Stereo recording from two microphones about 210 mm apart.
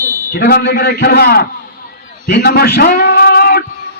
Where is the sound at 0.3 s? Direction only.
45° left (ahead or behind).